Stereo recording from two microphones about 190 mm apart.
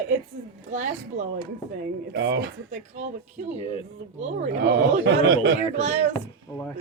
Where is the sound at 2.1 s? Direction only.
65° right (ahead or behind).